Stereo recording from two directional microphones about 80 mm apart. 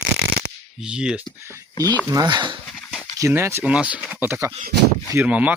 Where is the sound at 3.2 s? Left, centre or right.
Right.